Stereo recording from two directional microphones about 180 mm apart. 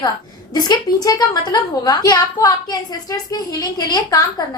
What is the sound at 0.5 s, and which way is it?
A woman's voice, 25° left (ahead or behind).